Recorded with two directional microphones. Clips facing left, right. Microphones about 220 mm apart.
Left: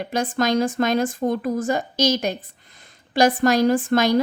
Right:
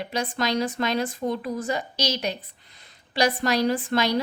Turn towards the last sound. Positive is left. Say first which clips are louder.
# left 5 dB
turn(degrees=45)  # may be behind; listen again after turning